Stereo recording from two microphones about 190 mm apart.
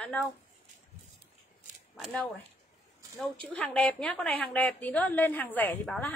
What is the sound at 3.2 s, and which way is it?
A woman's voice, 5° left (ahead or behind).